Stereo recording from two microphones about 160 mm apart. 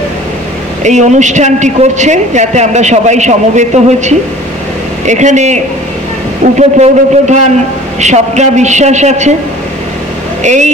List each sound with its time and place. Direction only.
0.8 s a woman's voice: 50° right (ahead or behind)
10.4 s a woman's voice: 50° right (ahead or behind)